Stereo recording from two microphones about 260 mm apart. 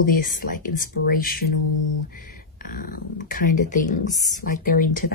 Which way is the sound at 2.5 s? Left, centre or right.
Left.